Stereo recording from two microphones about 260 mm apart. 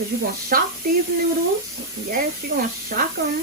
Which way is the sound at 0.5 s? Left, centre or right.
Right.